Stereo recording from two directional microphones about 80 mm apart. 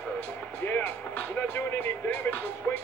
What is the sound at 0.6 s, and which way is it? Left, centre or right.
Speech, left.